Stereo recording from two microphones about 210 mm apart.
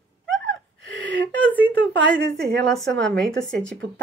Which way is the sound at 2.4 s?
Centre (ahead or behind).